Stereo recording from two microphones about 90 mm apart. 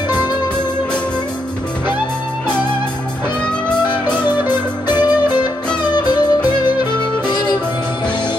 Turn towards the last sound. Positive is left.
turn(degrees=50)  # may be behind; listen again after turning